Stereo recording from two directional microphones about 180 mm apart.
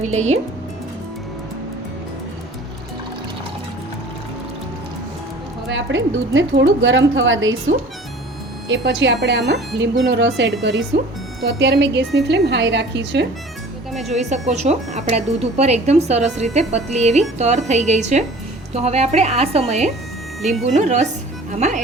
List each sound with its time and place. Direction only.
0.0 s speech: 40° right (ahead or behind)
5.6 s a woman's voice: 90° right
8.6 s a woman's voice: 90° right; by 13.2 s 75° right (ahead or behind)
14.1 s speech: 40° right (ahead or behind)